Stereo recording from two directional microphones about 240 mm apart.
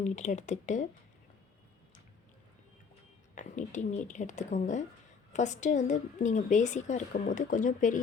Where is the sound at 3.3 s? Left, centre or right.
Left.